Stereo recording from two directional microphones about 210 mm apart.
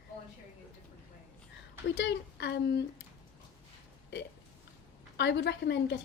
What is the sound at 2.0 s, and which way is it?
Speech, 55° left (ahead or behind).